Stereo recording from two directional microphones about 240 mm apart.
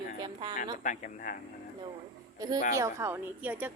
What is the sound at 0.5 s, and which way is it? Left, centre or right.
Speech, left.